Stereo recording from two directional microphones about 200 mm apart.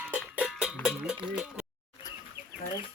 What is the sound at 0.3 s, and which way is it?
Cowbell, 5° right (ahead or behind).